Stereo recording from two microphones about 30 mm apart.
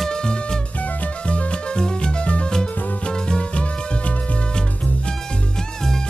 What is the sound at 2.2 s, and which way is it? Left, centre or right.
Music, left.